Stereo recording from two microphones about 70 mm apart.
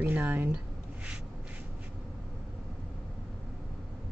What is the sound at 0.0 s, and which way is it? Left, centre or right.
Speech, right.